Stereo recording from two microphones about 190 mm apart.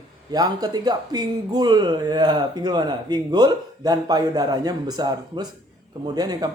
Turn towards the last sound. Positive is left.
turn(degrees=-20)  # may be behind; listen again after turning